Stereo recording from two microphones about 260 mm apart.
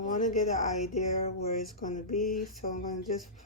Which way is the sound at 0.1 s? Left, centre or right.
Left.